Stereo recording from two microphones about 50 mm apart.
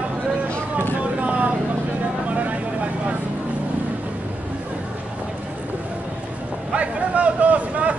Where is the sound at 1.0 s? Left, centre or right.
Right.